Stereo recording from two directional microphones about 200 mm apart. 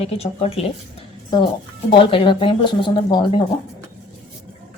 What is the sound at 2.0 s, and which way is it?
Speech, 25° left (ahead or behind).